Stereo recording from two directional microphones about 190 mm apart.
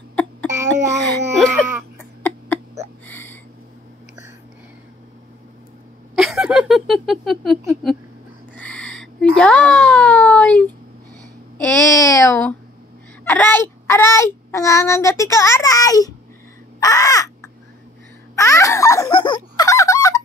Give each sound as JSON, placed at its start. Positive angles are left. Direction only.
{"t": 0.1, "sound": "cough", "side_deg": 10}
{"t": 1.0, "sound": "a sound", "side_deg": 5}
{"t": 6.1, "sound": "a sound", "side_deg": -5}
{"t": 11.5, "sound": "babbling", "side_deg": 15}
{"t": 13.2, "sound": "a child's voice", "side_deg": 10}
{"t": 18.3, "sound": "baby laughter", "side_deg": 15}